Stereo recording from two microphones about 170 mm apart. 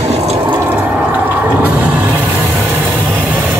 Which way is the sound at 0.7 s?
10° right (ahead or behind).